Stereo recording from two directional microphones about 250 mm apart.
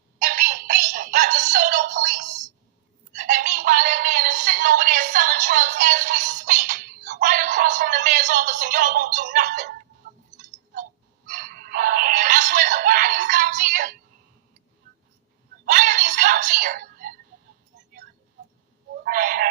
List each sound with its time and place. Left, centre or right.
0.2 s synthetic singing: right
3.1 s a sound: right
11.3 s music: right
15.6 s music: right
19.0 s owl: right